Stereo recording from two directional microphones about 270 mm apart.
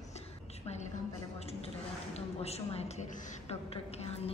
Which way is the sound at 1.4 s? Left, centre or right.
Left.